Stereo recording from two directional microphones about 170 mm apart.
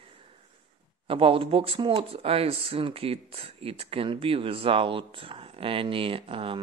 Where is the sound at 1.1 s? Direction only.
30° right (ahead or behind).